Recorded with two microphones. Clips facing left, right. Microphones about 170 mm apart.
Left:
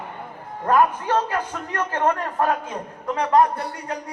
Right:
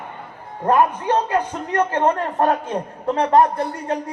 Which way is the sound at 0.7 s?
35° right (ahead or behind).